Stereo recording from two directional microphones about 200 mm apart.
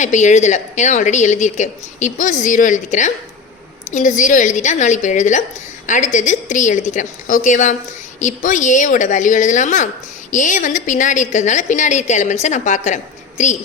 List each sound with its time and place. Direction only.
0.0 s a woman's voice: 35° left (ahead or behind)